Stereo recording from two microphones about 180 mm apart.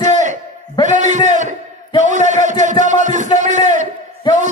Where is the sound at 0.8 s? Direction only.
40° right (ahead or behind).